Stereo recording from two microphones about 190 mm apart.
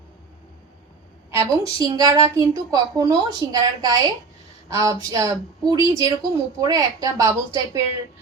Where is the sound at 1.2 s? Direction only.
15° right (ahead or behind).